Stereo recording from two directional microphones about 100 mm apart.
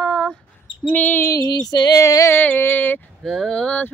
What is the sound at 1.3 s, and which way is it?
Female singing, 40° left (ahead or behind).